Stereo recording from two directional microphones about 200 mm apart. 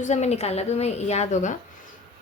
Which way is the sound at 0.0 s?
35° left (ahead or behind).